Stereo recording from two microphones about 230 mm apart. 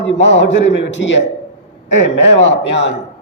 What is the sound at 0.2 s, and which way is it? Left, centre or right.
Speech, left.